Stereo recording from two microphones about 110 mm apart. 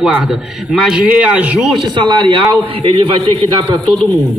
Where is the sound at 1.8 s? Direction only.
45° right (ahead or behind).